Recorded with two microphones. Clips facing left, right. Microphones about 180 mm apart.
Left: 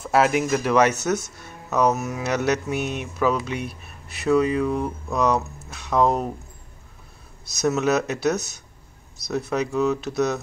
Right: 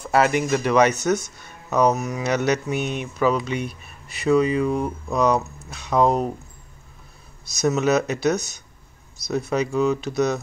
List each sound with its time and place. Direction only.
0.0 s speech: centre (ahead or behind)
7.5 s speech: centre (ahead or behind)